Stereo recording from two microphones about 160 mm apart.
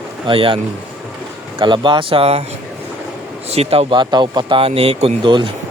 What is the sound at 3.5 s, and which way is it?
A man's voice, 40° right (ahead or behind).